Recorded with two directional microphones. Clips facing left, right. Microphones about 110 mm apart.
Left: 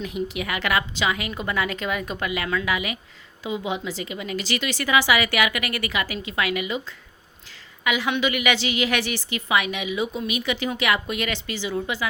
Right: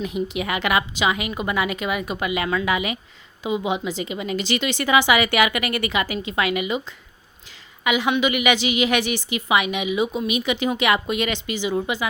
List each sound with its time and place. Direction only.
0.0 s a woman's voice: 20° right (ahead or behind)